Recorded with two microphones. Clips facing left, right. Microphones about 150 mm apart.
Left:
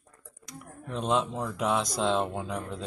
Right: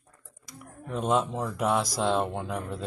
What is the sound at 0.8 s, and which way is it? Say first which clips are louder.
Speech: right 2 dB; 10° right (ahead or behind).